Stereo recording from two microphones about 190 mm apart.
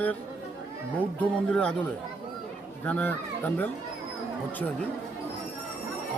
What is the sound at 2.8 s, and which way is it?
Speech, 10° left (ahead or behind).